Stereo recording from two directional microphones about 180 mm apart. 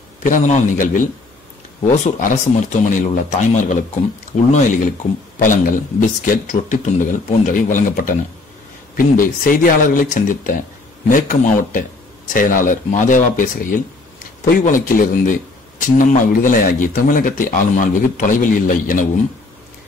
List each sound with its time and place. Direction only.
0.2 s speech: 45° left (ahead or behind)
4.5 s speech: 40° left (ahead or behind)